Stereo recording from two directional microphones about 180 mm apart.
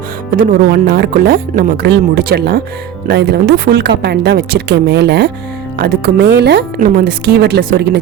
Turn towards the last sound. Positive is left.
turn(degrees=-70)  # may be behind; listen again after turning